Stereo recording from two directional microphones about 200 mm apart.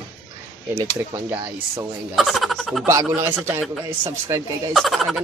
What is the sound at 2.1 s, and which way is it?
Speech, centre (ahead or behind).